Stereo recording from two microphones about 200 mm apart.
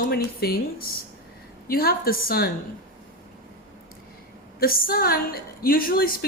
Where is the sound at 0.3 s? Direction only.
50° left (ahead or behind).